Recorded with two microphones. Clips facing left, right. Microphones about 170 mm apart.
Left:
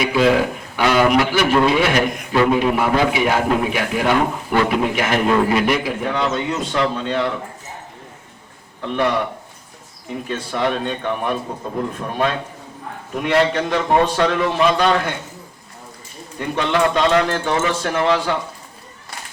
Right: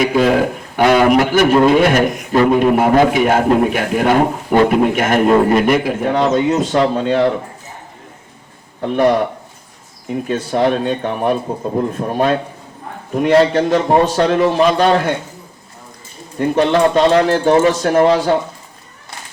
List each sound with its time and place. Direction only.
0.0 s a sound: 45° right (ahead or behind)
0.8 s a man's voice: 45° right (ahead or behind)
8.8 s a man's voice: 40° right (ahead or behind)
10.2 s a man's voice: 40° right (ahead or behind)
16.4 s a man's voice: 45° right (ahead or behind)